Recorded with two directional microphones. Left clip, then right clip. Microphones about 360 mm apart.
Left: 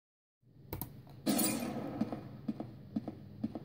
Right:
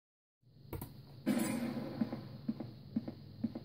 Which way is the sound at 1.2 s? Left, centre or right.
Left.